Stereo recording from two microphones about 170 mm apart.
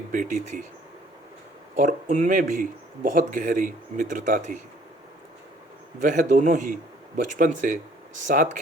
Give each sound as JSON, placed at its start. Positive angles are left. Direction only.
{"t": 0.1, "sound": "speech", "side_deg": -50}
{"t": 1.7, "sound": "speech", "side_deg": -50}
{"t": 6.0, "sound": "speech", "side_deg": -50}